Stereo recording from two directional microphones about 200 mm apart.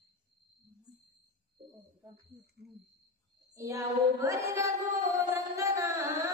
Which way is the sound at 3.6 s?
15° right (ahead or behind).